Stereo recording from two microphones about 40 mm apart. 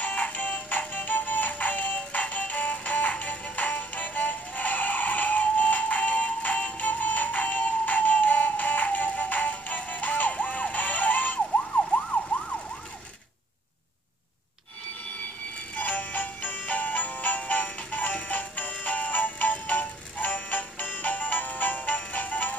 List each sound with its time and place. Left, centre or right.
0.0 s music: left
12.1 s emergency vehicle: left
15.7 s music: left